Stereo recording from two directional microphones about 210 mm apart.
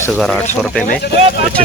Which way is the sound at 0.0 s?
Centre (ahead or behind).